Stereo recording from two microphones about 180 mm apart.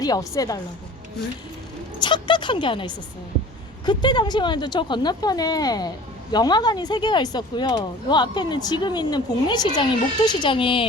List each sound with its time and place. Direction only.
0.0 s speech: 20° left (ahead or behind)
2.0 s speech: 25° left (ahead or behind)